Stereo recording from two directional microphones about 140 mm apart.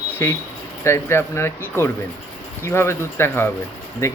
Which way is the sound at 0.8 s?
20° left (ahead or behind).